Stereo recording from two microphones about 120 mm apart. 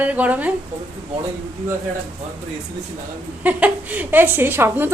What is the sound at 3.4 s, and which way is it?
A woman's voice, 15° right (ahead or behind).